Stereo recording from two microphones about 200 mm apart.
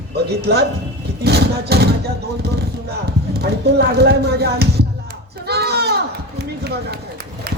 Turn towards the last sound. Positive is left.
turn(degrees=-55)  # may be behind; listen again after turning